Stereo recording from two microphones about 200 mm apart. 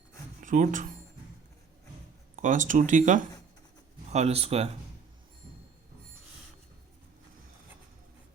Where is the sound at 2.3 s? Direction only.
40° right (ahead or behind).